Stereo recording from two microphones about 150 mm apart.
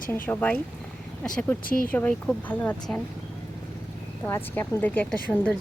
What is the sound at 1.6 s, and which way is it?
Speech, 70° left (ahead or behind).